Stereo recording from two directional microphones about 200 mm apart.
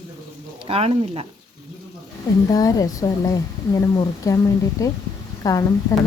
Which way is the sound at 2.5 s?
15° left (ahead or behind).